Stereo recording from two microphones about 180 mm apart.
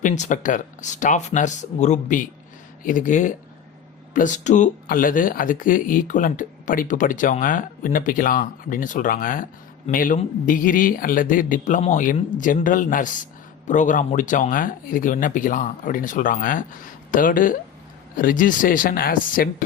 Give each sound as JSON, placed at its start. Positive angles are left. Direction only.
{"t": 0.0, "sound": "speech", "side_deg": 45}